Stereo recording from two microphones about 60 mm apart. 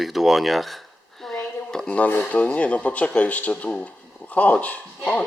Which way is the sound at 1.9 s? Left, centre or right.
Left.